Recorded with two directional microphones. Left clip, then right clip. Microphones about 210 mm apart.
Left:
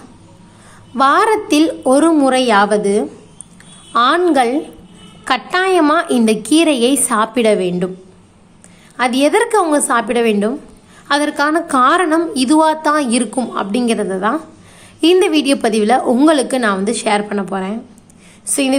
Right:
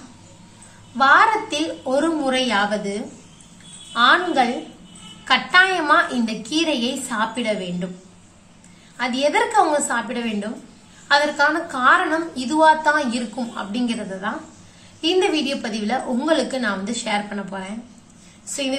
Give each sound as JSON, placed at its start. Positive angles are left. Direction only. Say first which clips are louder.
{"t": 0.9, "sound": "a woman's voice", "louder": "left 3 dB", "side_deg": 50}
{"t": 8.9, "sound": "a woman's voice", "louder": "left 6 dB", "side_deg": 55}